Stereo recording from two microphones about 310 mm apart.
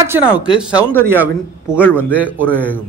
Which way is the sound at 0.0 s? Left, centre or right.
Centre.